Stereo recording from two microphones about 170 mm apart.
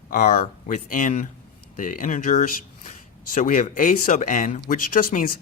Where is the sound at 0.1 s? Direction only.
50° left (ahead or behind).